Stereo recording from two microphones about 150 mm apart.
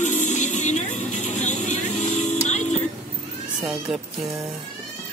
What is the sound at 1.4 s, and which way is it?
Vehicle, 50° left (ahead or behind).